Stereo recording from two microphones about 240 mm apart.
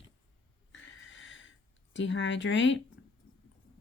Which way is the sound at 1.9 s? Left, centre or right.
Left.